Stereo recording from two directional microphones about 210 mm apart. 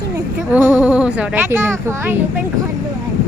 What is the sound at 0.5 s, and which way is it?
Speech, 10° right (ahead or behind).